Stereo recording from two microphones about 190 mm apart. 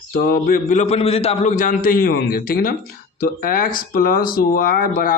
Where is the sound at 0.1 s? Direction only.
55° left (ahead or behind).